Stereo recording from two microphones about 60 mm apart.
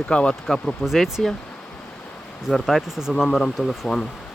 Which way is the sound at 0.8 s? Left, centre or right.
Centre.